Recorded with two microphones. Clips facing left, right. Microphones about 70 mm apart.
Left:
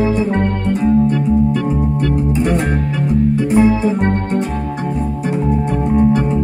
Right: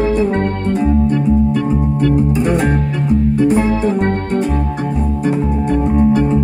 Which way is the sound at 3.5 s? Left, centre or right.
Centre.